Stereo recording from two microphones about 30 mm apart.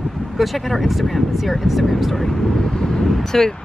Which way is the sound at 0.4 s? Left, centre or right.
Centre.